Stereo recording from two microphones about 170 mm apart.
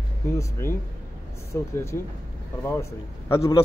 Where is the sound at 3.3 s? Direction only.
20° left (ahead or behind).